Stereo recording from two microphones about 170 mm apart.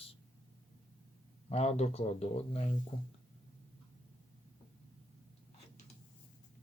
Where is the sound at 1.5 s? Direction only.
40° left (ahead or behind).